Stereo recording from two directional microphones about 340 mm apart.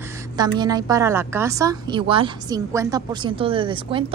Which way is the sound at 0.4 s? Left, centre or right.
Centre.